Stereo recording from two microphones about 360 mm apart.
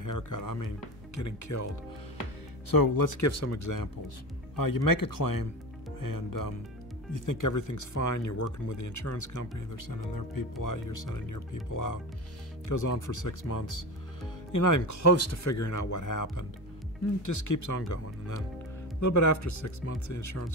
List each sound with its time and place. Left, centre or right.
0.0 s speech: left
2.7 s speech: left